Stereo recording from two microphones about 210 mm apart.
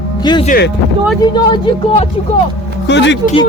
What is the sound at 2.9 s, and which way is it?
Speech, 55° left (ahead or behind).